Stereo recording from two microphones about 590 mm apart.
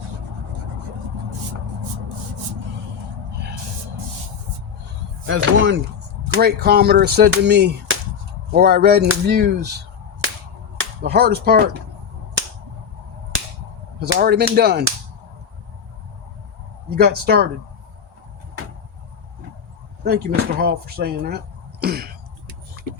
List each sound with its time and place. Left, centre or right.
5.2 s speech: centre
10.8 s speech: centre
14.1 s speech: centre
16.9 s speech: centre
20.1 s speech: centre
21.8 s cough: centre